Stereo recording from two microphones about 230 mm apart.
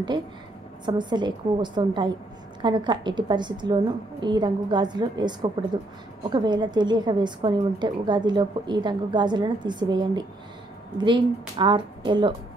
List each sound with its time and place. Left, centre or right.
0.8 s a woman's voice: centre